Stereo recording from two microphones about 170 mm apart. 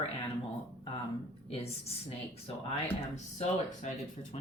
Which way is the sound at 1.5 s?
35° left (ahead or behind).